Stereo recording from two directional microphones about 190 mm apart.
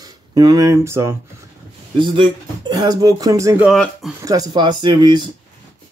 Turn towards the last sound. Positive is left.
turn(degrees=-25)  # may be behind; listen again after turning